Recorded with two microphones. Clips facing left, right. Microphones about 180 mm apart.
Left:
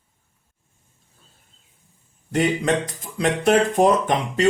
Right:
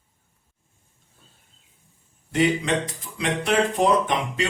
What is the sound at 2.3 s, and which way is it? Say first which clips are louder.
Speech: left 1 dB; 45° left (ahead or behind).